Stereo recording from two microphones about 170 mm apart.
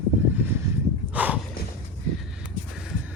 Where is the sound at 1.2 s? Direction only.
10° right (ahead or behind).